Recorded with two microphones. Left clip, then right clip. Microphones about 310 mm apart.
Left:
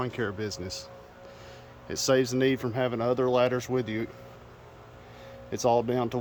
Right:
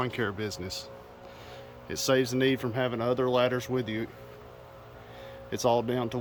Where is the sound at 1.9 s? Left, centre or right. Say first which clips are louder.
Left 1 dB; centre.